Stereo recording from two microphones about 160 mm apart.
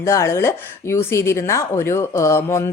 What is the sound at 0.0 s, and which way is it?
Speech, 15° left (ahead or behind).